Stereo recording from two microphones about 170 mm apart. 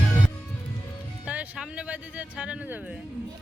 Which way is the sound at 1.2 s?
10° right (ahead or behind).